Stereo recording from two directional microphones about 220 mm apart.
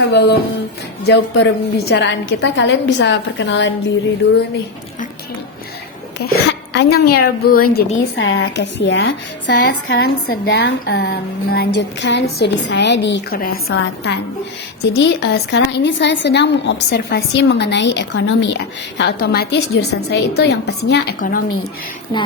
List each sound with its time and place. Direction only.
0.1 s a woman's voice: 50° left (ahead or behind)
6.1 s a woman's voice: 50° left (ahead or behind)